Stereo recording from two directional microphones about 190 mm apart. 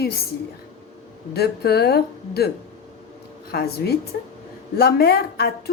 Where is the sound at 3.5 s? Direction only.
55° left (ahead or behind).